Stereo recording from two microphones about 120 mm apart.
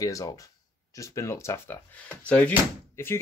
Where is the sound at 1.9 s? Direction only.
10° left (ahead or behind).